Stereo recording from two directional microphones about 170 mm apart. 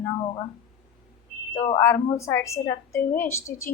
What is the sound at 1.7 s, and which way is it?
A woman's voice, 20° left (ahead or behind).